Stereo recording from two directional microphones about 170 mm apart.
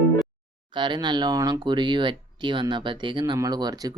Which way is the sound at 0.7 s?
25° right (ahead or behind).